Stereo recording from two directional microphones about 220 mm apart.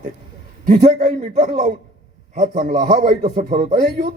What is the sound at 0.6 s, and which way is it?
Speech, 40° right (ahead or behind).